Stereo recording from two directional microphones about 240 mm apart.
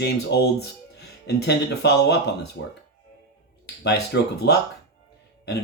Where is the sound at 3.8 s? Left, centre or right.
Left.